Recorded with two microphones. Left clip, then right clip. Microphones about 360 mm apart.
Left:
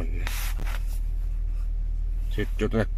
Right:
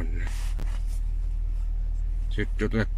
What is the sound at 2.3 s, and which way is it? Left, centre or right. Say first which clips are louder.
Speech: left 2 dB; centre.